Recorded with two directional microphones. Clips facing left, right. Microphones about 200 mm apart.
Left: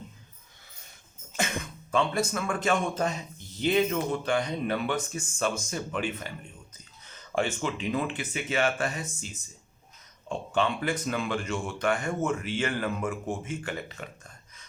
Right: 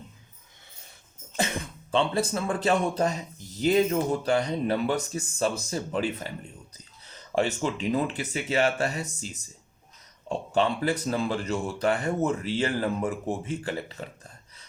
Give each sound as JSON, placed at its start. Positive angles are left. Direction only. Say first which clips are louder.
{"t": 1.9, "sound": "a man's voice", "louder": "right 2 dB", "side_deg": -30}